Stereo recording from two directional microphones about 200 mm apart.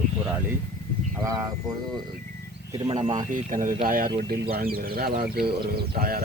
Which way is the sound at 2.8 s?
30° right (ahead or behind).